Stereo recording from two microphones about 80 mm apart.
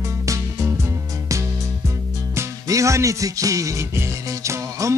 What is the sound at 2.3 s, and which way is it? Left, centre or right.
Music, right.